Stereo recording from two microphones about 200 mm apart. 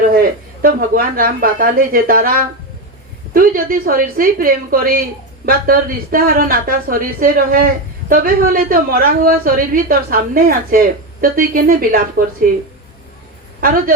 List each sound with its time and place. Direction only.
0.1 s a woman's voice: 45° right (ahead or behind)